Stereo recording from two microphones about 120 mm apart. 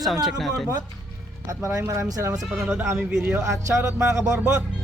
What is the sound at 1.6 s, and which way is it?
Speech, 25° right (ahead or behind).